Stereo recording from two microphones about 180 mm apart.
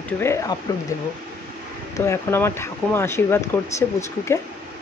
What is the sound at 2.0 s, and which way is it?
Speech, 15° left (ahead or behind).